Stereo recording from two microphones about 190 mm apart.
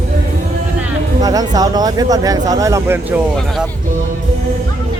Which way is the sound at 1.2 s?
20° right (ahead or behind).